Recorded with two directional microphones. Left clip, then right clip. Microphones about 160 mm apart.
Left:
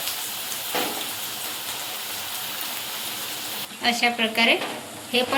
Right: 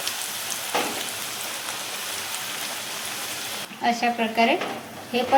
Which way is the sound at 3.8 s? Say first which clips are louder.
Left 1 dB; 40° right (ahead or behind).